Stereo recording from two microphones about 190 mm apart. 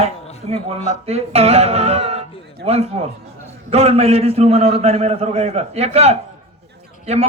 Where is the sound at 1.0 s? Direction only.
35° right (ahead or behind).